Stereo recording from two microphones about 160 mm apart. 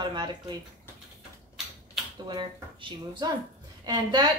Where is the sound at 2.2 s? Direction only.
30° right (ahead or behind).